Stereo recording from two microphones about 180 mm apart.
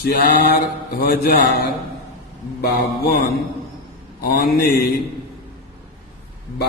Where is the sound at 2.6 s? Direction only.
60° left (ahead or behind).